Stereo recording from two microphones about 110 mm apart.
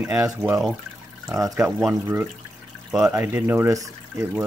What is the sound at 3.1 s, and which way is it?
Speech, 15° right (ahead or behind).